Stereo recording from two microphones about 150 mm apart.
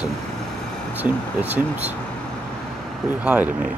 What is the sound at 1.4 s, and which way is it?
Speech, 10° right (ahead or behind).